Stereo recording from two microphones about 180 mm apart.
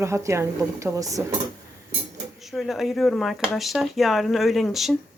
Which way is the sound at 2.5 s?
Centre (ahead or behind).